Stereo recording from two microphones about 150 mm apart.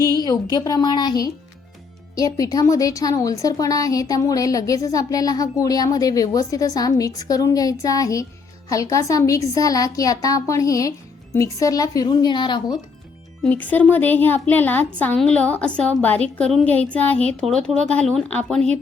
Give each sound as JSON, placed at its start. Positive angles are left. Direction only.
{"t": 0.0, "sound": "speech", "side_deg": 25}
{"t": 13.4, "sound": "a woman's voice", "side_deg": 10}